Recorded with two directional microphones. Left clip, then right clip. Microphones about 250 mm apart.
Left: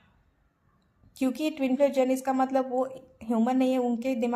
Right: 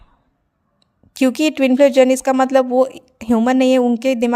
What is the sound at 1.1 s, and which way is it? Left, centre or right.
A woman's voice, right.